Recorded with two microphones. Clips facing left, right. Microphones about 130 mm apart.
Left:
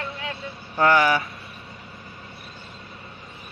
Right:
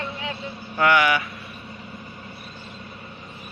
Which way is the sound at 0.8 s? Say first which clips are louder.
Left 1 dB; 35° left (ahead or behind).